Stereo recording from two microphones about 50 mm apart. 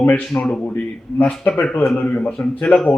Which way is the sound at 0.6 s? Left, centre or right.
Left.